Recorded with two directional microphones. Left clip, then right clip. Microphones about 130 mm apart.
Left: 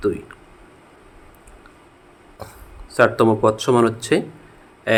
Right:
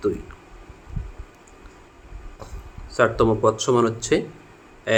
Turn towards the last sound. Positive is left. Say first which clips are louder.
# left 2 dB
turn(degrees=35)  # may be behind; listen again after turning